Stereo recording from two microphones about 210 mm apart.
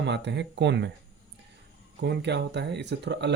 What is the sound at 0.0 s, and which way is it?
Speech, 55° right (ahead or behind).